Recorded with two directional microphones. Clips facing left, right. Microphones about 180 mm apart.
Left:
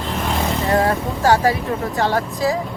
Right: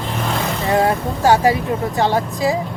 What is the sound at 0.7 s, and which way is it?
Speech, 20° right (ahead or behind).